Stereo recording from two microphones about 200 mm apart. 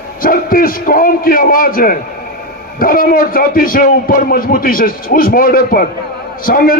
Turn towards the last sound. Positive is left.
turn(degrees=45)  # may be behind; listen again after turning